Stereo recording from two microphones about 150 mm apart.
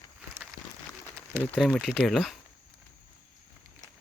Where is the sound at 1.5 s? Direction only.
Centre (ahead or behind).